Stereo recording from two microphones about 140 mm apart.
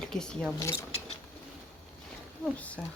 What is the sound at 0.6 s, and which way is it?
Speech, 20° left (ahead or behind).